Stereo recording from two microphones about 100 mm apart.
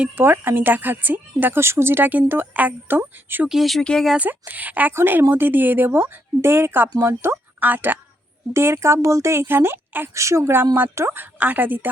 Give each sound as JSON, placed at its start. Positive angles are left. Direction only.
{"t": 0.0, "sound": "a woman's voice", "side_deg": -20}
{"t": 3.5, "sound": "speech", "side_deg": 0}
{"t": 4.1, "sound": "a woman's voice", "side_deg": -15}